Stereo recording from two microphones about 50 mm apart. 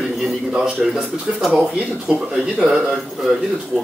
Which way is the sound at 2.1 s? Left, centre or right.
Right.